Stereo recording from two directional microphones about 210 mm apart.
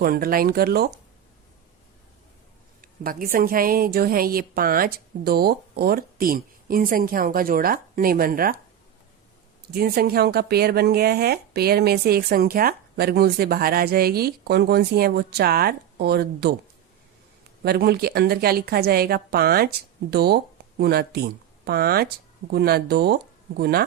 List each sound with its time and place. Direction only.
0.0 s speech: 45° right (ahead or behind)
2.8 s speech: 45° right (ahead or behind)
9.7 s speech: 45° right (ahead or behind)
17.6 s speech: 50° right (ahead or behind)